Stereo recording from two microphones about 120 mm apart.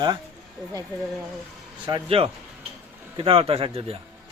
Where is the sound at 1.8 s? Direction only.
45° right (ahead or behind).